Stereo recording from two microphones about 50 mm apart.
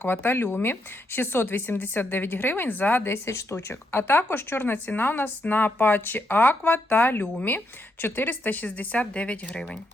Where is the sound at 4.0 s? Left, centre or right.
Left.